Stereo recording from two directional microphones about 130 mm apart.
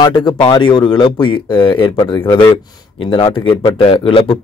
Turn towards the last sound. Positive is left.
turn(degrees=45)  # may be behind; listen again after turning